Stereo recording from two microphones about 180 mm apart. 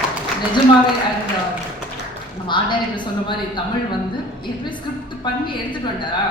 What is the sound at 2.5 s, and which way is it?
A woman's voice, 25° left (ahead or behind).